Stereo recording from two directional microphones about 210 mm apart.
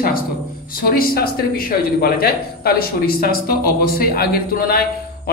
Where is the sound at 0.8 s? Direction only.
45° left (ahead or behind).